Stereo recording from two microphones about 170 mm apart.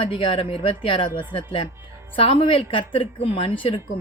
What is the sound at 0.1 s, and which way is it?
Speech, 30° left (ahead or behind).